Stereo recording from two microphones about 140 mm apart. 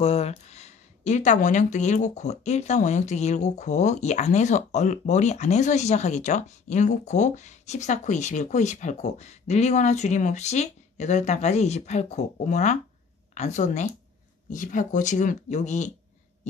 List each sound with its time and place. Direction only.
0.0 s speech: 45° left (ahead or behind)